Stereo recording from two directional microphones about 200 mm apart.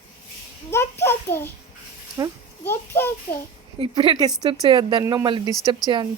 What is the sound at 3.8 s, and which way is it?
Speech, 25° right (ahead or behind).